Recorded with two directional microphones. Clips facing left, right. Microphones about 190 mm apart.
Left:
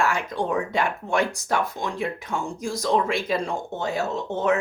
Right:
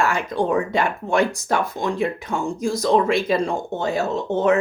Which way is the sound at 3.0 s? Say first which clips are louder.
Right 5 dB; 65° right (ahead or behind).